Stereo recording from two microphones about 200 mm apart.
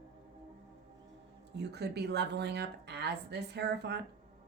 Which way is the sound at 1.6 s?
55° right (ahead or behind).